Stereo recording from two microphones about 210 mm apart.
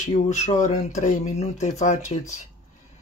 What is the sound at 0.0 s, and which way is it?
Speech, 35° left (ahead or behind).